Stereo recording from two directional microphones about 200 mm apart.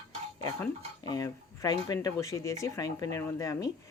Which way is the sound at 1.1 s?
20° left (ahead or behind).